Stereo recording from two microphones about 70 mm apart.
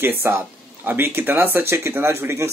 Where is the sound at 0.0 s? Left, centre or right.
Right.